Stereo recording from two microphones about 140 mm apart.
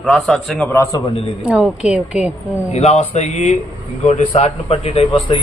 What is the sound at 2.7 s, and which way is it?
A man's voice, 50° left (ahead or behind).